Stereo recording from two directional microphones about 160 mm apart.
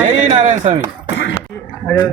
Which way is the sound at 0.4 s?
45° right (ahead or behind).